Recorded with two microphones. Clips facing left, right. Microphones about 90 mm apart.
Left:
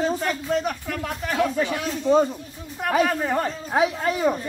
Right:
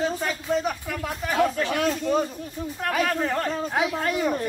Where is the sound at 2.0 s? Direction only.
25° left (ahead or behind).